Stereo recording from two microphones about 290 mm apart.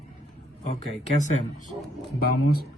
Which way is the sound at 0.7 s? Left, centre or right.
Left.